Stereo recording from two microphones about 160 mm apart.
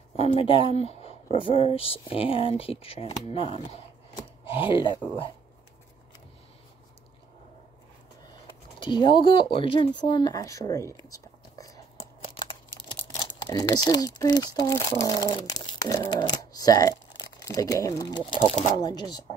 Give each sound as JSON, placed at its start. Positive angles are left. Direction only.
{"t": 0.1, "sound": "speech", "side_deg": 40}
{"t": 8.7, "sound": "speech", "side_deg": 30}
{"t": 13.2, "sound": "speech", "side_deg": 25}